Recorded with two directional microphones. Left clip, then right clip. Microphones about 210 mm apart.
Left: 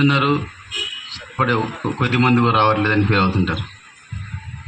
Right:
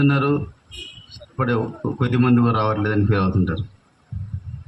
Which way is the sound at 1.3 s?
50° right (ahead or behind).